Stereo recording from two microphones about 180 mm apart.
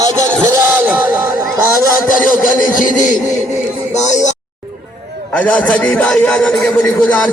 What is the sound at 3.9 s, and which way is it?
Speech, 40° left (ahead or behind).